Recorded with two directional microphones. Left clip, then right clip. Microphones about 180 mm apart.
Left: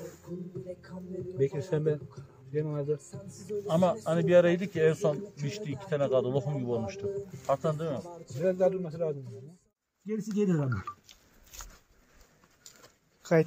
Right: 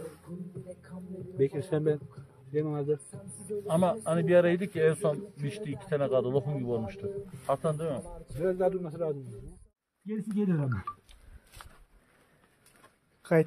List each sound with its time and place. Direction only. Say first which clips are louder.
1.4 s a man's voice: right 1 dB; 45° right (ahead or behind)
3.1 s music: even; 50° left (ahead or behind)
3.6 s a man's voice: left 1 dB; centre (ahead or behind)
8.5 s a man's voice: left 2 dB; 40° right (ahead or behind)
10.0 s a sound: left 3 dB; 10° left (ahead or behind)